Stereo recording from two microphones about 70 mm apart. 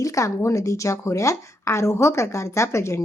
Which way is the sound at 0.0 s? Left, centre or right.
Left.